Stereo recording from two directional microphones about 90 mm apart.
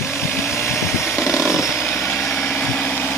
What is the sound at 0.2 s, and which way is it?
Vehicle, 30° left (ahead or behind).